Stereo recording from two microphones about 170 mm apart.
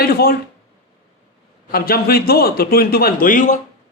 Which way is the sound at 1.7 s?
60° left (ahead or behind).